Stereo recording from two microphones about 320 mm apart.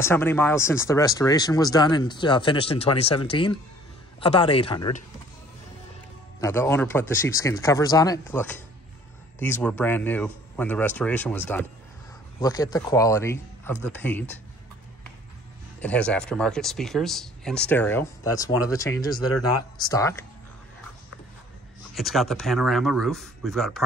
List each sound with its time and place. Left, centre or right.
0.0 s speech: centre
6.4 s speech: centre
15.8 s speech: centre
21.9 s speech: centre